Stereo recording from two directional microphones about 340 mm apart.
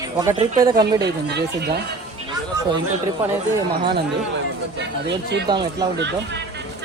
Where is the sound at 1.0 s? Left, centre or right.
Right.